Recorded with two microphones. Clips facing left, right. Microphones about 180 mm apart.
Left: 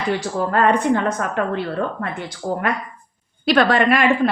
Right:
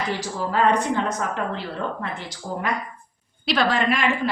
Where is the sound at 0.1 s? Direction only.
55° left (ahead or behind).